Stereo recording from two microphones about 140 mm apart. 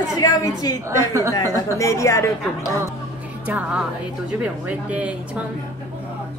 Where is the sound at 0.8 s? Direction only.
20° right (ahead or behind).